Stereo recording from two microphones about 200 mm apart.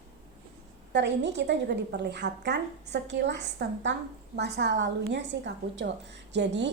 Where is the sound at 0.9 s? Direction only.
60° right (ahead or behind).